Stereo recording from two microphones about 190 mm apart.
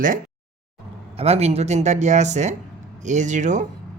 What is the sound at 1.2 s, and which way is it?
Speech, 35° right (ahead or behind).